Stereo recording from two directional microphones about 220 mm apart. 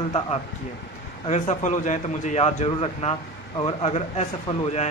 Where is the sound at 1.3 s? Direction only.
35° left (ahead or behind).